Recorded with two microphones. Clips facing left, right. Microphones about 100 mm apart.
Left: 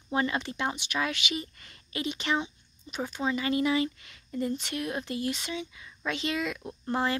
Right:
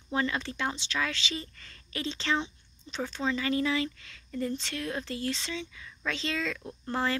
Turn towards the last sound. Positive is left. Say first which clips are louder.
# left 2 dB
turn(degrees=20)  # may be behind; listen again after turning